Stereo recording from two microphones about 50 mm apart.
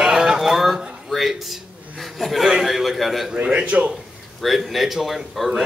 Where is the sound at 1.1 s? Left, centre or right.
Centre.